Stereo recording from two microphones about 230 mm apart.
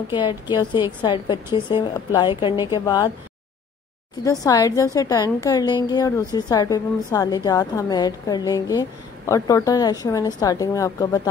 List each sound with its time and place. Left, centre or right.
0.1 s a woman's voice: centre
4.2 s a woman's voice: centre